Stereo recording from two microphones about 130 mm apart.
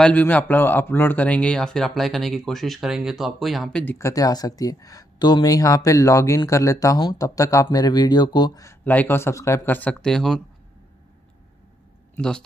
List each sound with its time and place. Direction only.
0.0 s a man's voice: 10° left (ahead or behind)
3.8 s speech: 20° left (ahead or behind)
8.6 s speech: 15° left (ahead or behind)
12.2 s speech: 5° left (ahead or behind)